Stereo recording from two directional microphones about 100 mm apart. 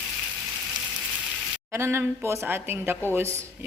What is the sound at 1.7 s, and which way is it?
A woman's voice, 25° right (ahead or behind).